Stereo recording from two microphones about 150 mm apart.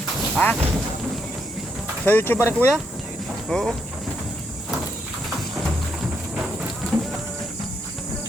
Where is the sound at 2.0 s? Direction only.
15° left (ahead or behind).